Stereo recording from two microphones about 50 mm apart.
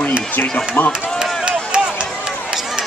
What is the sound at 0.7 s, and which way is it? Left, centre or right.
Speech, left.